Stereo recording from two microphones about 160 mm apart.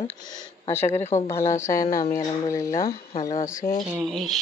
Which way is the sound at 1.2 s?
20° left (ahead or behind).